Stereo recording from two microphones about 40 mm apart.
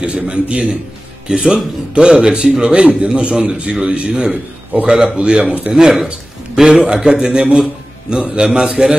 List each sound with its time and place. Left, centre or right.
0.0 s speech: right
5.7 s a man's voice: centre